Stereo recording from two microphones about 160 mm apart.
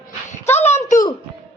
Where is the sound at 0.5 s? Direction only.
45° left (ahead or behind).